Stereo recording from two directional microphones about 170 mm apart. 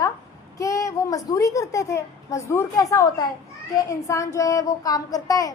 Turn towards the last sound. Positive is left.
turn(degrees=20)  # may be behind; listen again after turning